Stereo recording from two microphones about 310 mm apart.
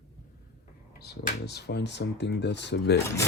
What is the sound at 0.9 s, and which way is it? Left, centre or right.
Speech, left.